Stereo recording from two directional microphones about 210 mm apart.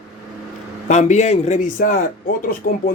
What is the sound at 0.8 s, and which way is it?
Speech, 35° left (ahead or behind).